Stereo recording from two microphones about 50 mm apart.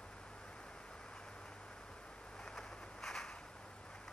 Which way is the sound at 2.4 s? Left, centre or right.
Centre.